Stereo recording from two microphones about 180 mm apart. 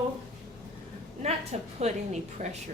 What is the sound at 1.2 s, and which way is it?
A woman's voice, 35° right (ahead or behind).